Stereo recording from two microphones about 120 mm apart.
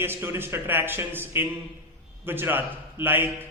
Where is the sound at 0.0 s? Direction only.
20° right (ahead or behind).